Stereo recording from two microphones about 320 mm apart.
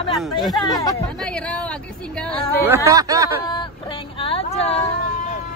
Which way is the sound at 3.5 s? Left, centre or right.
Centre.